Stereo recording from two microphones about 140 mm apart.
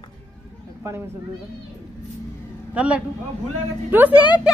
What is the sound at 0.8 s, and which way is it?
Speech, 20° right (ahead or behind).